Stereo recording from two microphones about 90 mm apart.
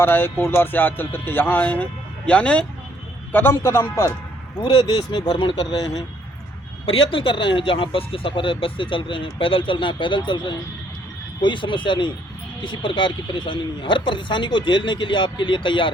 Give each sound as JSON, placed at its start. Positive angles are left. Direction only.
{"t": 0.0, "sound": "speech", "side_deg": 25}
{"t": 3.5, "sound": "speech", "side_deg": 30}
{"t": 4.6, "sound": "speech", "side_deg": 50}
{"t": 7.1, "sound": "speech", "side_deg": 75}